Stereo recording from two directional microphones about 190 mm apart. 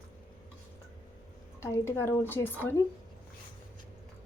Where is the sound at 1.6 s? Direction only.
15° left (ahead or behind).